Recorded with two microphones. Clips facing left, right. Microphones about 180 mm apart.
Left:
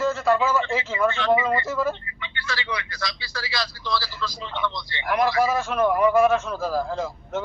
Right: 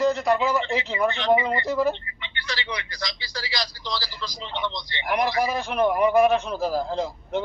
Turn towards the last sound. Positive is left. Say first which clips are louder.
# right 1 dB
turn(degrees=-20)  # may be behind; listen again after turning